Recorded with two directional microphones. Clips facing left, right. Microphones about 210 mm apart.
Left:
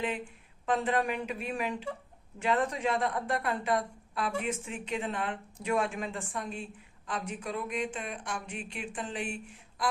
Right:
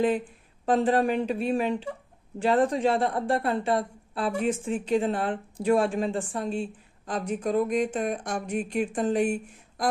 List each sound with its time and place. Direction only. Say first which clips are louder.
0.6 s a woman's voice: right 7 dB; 35° right (ahead or behind)